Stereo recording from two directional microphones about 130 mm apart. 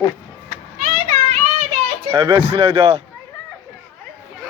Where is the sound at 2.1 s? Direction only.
45° right (ahead or behind).